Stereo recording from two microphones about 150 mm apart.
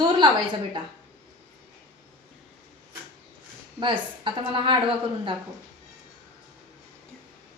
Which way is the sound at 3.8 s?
35° right (ahead or behind).